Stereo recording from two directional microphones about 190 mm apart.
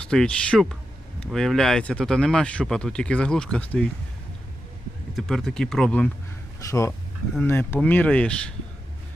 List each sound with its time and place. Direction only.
0.1 s speech: 5° left (ahead or behind)
5.1 s speech: centre (ahead or behind)
6.6 s speech: 15° left (ahead or behind)